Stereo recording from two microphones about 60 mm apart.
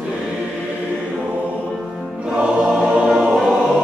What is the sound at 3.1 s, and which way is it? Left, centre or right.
Choir, centre.